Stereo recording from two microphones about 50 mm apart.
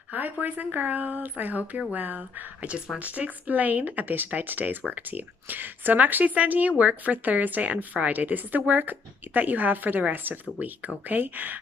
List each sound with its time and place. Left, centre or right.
0.1 s a woman's voice: right